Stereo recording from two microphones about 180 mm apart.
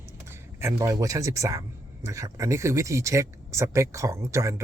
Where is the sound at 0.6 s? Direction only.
20° right (ahead or behind).